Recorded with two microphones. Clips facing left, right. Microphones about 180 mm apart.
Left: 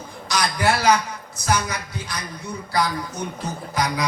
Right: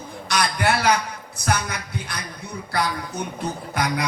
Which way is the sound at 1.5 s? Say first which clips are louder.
Left 2 dB; 60° right (ahead or behind).